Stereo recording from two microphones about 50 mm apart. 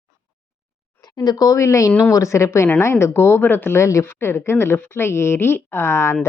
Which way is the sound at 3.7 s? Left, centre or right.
Left.